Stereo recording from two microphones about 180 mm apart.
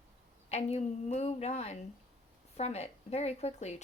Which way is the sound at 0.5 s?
40° left (ahead or behind).